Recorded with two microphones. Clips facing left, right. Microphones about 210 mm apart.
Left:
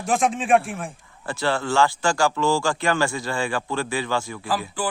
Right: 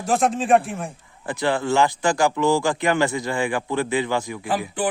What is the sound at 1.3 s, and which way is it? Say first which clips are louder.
A man's voice: right 2 dB; 15° right (ahead or behind).